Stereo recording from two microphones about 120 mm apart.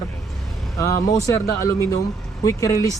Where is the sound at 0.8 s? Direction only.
25° left (ahead or behind).